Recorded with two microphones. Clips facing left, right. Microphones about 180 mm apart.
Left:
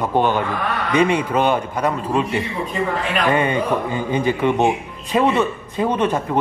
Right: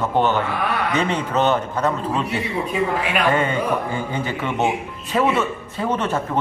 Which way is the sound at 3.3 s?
20° left (ahead or behind).